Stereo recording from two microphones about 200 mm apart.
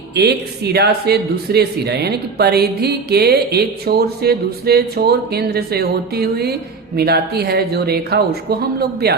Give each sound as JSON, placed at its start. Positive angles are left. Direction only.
{"t": 0.1, "sound": "speech", "side_deg": -55}